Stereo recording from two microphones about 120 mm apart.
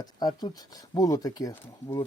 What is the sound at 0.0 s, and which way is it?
Speech, 35° left (ahead or behind).